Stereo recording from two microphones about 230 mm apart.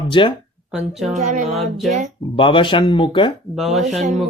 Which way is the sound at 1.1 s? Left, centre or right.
Right.